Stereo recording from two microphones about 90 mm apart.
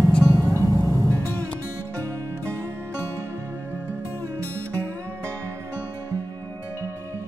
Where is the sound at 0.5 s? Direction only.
35° right (ahead or behind).